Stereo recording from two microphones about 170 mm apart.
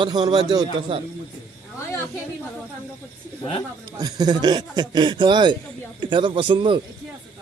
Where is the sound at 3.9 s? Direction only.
20° right (ahead or behind).